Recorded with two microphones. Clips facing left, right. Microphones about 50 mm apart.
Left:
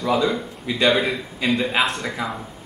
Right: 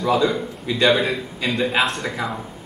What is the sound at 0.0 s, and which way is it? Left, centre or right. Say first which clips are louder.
A man's voice: right 2 dB; centre.